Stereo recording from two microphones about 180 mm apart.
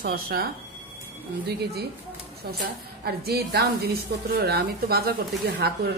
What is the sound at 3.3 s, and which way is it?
A woman's voice, 60° right (ahead or behind).